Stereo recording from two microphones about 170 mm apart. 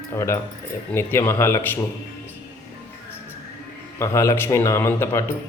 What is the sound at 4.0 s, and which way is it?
Speech, 15° left (ahead or behind).